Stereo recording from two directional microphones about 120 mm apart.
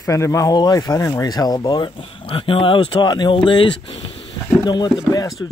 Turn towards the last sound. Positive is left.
turn(degrees=30)  # may be behind; listen again after turning